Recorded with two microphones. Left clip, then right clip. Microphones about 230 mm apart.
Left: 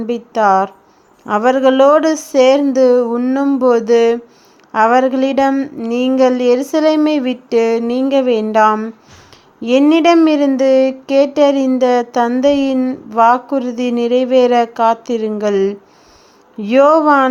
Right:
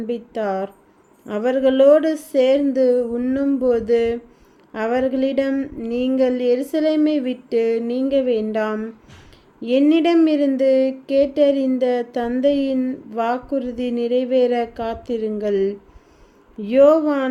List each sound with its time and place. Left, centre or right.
0.1 s speech: centre